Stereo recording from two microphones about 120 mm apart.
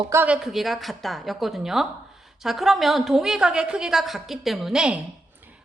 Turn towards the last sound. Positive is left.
turn(degrees=-15)  # may be behind; listen again after turning